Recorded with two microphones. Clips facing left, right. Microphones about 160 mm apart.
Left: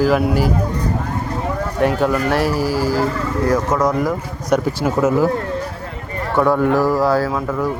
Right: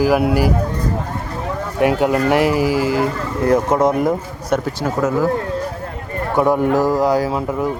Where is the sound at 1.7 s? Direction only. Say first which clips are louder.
Right 2 dB; 15° right (ahead or behind).